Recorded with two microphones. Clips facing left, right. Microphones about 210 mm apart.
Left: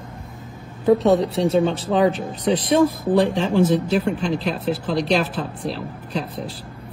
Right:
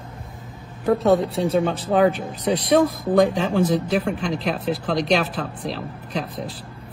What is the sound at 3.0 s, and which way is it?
A woman's voice, 30° left (ahead or behind).